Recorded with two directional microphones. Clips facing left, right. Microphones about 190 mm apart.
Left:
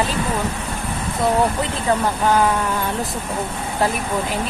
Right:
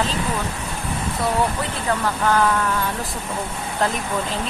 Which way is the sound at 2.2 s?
15° left (ahead or behind).